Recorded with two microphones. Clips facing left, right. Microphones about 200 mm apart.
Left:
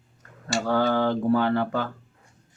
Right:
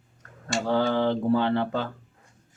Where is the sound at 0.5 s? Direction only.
20° right (ahead or behind).